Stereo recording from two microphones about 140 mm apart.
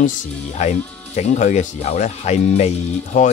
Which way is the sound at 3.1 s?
70° left (ahead or behind).